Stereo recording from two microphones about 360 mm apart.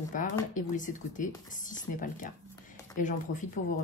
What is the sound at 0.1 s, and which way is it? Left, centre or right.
Speech, left.